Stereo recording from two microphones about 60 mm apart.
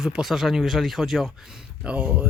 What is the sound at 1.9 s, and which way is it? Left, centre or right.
Speech, right.